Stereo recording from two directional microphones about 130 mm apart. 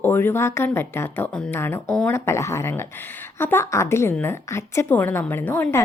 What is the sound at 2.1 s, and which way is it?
Speech, 20° left (ahead or behind).